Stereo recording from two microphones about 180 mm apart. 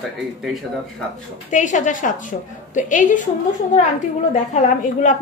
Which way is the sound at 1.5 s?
45° left (ahead or behind).